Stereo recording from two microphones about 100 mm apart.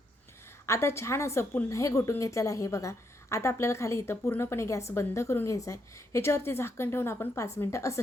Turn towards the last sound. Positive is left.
turn(degrees=30)  # may be behind; listen again after turning